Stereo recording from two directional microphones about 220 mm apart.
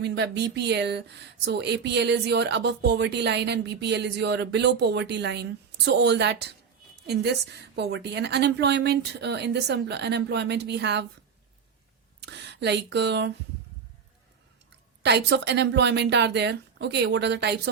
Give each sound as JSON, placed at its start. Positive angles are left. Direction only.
{"t": 0.0, "sound": "speech", "side_deg": -50}
{"t": 12.2, "sound": "speech", "side_deg": -50}
{"t": 15.0, "sound": "speech", "side_deg": -50}